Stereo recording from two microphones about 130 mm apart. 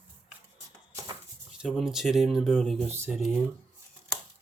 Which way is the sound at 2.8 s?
15° right (ahead or behind).